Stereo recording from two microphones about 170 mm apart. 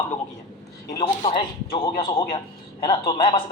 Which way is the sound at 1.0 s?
30° left (ahead or behind).